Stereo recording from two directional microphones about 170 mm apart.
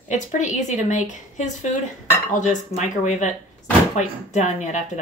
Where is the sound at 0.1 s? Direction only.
45° left (ahead or behind).